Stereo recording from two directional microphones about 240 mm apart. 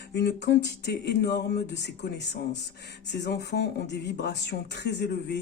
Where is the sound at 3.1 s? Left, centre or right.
Left.